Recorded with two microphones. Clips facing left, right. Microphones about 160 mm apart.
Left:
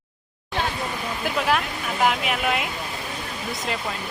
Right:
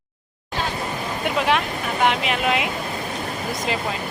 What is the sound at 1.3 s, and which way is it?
Speech, centre (ahead or behind).